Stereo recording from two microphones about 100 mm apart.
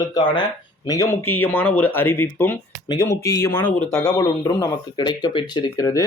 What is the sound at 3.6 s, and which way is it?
Speech, 15° left (ahead or behind).